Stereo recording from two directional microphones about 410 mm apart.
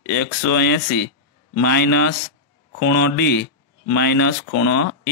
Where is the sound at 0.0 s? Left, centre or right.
Left.